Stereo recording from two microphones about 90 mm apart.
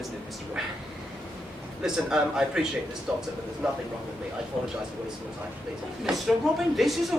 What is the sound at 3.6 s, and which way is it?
Speech, 5° right (ahead or behind).